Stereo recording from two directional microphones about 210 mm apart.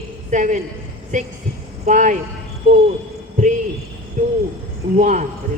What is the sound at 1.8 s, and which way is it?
Speech, 35° right (ahead or behind).